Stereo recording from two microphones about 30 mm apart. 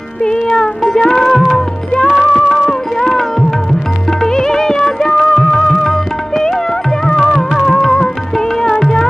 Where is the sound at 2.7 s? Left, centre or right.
Centre.